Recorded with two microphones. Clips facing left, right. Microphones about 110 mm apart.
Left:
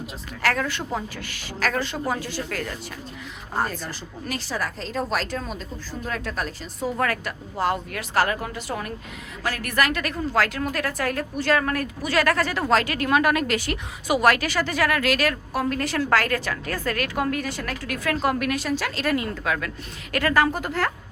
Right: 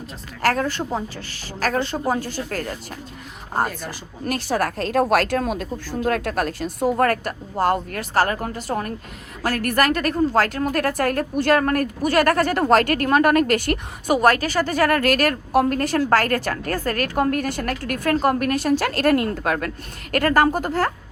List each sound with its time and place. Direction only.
0.4 s speech: 35° right (ahead or behind)
4.3 s speech: 60° right (ahead or behind)
6.9 s a woman's voice: 45° right (ahead or behind)